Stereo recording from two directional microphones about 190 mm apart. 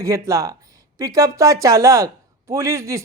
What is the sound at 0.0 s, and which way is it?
A man's voice, 15° right (ahead or behind).